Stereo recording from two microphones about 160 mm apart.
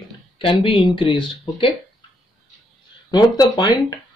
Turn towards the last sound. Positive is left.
turn(degrees=25)  # may be behind; listen again after turning